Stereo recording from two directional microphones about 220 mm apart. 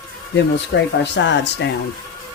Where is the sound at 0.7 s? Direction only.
55° left (ahead or behind).